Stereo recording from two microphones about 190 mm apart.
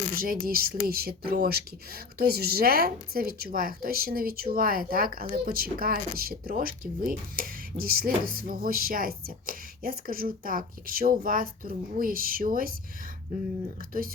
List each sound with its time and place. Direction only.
0.1 s speech: 50° right (ahead or behind)